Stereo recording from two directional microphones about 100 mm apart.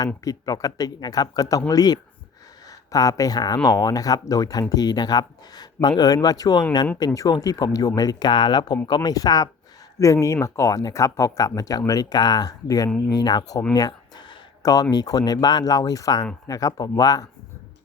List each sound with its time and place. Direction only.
0.3 s speech: 35° left (ahead or behind)
14.6 s speech: 40° left (ahead or behind)